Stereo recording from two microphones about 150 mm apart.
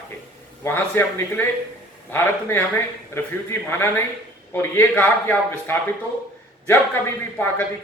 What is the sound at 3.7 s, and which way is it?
A man's voice, 15° left (ahead or behind).